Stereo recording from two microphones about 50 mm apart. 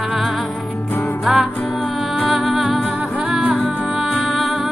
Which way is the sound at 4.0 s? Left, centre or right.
Centre.